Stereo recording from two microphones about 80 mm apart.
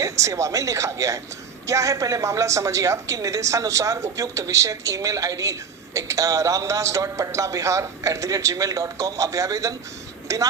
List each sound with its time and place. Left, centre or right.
0.0 s a woman's voice: right